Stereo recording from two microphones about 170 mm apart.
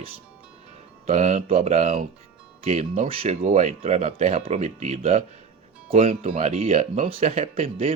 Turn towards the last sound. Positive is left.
turn(degrees=-35)  # may be behind; listen again after turning